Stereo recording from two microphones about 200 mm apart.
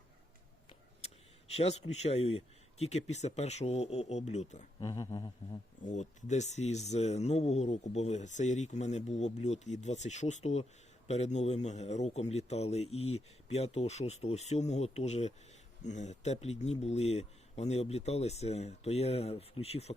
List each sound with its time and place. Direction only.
0.7 s speech: 30° left (ahead or behind)
4.8 s a sound: 20° left (ahead or behind)
5.8 s speech: 35° left (ahead or behind)